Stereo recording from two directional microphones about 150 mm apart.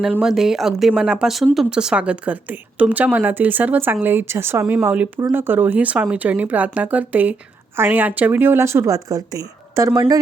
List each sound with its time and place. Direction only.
0.0 s a woman's voice: 5° right (ahead or behind); by 10.2 s 20° right (ahead or behind)